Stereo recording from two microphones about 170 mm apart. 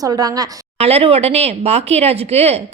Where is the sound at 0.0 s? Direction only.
20° right (ahead or behind).